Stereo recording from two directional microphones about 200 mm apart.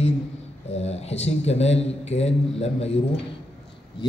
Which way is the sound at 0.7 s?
30° left (ahead or behind).